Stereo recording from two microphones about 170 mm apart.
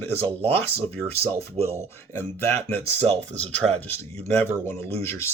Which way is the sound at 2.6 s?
35° right (ahead or behind).